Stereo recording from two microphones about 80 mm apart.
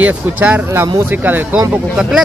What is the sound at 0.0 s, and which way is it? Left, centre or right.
Speech, centre.